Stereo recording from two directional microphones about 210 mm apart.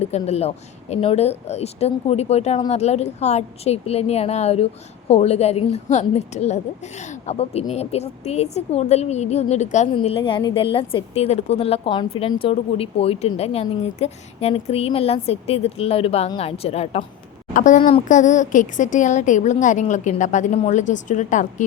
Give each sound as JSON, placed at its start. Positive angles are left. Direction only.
{"t": 0.0, "sound": "a woman's voice", "side_deg": 30}